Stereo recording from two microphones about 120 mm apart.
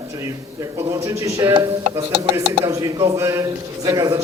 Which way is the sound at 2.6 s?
25° right (ahead or behind).